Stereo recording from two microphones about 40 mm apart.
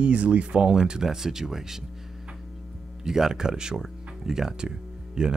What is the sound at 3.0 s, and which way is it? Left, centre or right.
Speech, centre.